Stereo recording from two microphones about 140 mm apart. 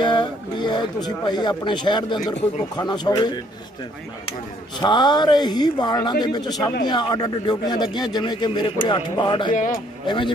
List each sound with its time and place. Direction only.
0.0 s mantra: 35° left (ahead or behind)
1.0 s a man's voice: 30° left (ahead or behind)
4.7 s a man's voice: 30° left (ahead or behind)
9.5 s speech: 70° left (ahead or behind)
10.0 s a man's voice: 35° left (ahead or behind)